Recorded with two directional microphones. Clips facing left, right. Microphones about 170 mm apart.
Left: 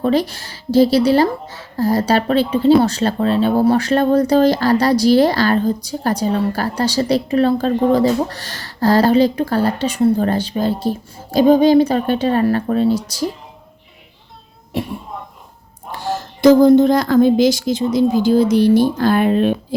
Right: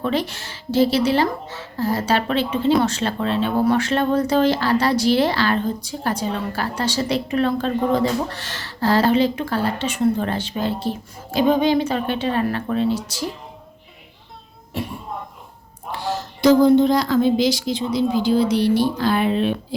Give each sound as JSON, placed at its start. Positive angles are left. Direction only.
{"t": 0.0, "sound": "speech", "side_deg": 40}
{"t": 15.9, "sound": "speech", "side_deg": 45}